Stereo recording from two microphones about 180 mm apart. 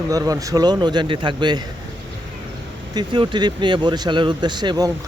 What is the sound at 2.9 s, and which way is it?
Speech, 25° right (ahead or behind).